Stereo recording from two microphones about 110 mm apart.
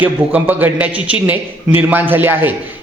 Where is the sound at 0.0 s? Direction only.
15° right (ahead or behind).